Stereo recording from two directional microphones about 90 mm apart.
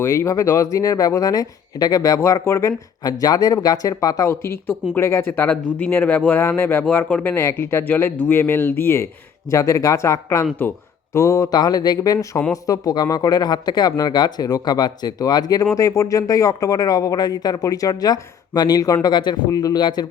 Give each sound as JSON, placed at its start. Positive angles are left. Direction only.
{"t": 0.0, "sound": "speech", "side_deg": 30}
{"t": 3.0, "sound": "speech", "side_deg": 45}
{"t": 4.3, "sound": "speech", "side_deg": 30}
{"t": 9.5, "sound": "speech", "side_deg": 35}